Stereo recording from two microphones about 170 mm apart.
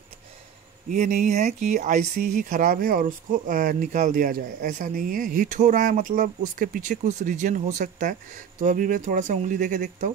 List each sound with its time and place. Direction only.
0.9 s speech: 45° right (ahead or behind)